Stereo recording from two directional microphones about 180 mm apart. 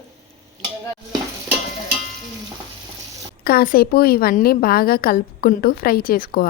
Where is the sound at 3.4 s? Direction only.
55° left (ahead or behind).